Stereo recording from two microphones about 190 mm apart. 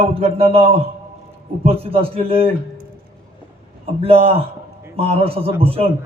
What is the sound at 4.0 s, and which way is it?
A man's voice, 30° right (ahead or behind).